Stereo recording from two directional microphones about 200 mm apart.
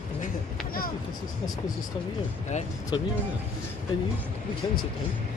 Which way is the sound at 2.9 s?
25° left (ahead or behind).